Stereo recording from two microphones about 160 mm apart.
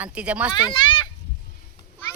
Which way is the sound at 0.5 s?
30° left (ahead or behind).